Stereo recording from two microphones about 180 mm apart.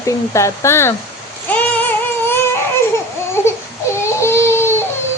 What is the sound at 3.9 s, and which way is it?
Baby cry, 15° left (ahead or behind).